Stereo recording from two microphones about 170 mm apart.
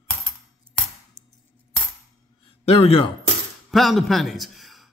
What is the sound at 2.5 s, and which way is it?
Speech, 35° left (ahead or behind).